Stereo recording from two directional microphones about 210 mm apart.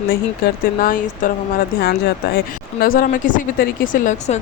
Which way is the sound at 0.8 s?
40° left (ahead or behind).